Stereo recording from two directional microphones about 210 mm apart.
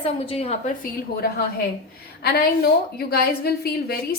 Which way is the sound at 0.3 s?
30° left (ahead or behind).